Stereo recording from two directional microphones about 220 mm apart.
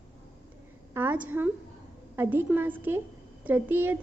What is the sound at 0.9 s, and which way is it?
A woman's voice, 10° right (ahead or behind).